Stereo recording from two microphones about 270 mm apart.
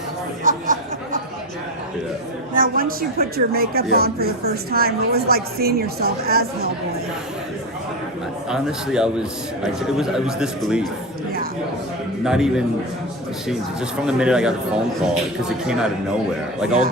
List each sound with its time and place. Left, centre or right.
0.4 s a sound: right
2.5 s a woman's voice: right
8.4 s speech: centre
12.2 s speech: centre
14.1 s speech: centre